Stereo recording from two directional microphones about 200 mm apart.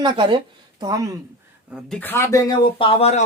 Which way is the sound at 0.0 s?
25° right (ahead or behind).